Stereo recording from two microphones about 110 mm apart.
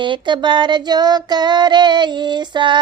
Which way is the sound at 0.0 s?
45° right (ahead or behind).